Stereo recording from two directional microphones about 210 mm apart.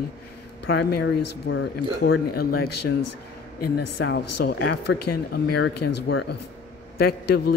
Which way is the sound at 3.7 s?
50° left (ahead or behind).